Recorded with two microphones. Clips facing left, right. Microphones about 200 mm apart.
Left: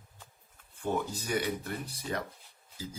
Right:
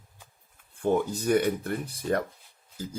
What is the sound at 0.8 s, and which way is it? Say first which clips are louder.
Speech: right 7 dB; 55° right (ahead or behind).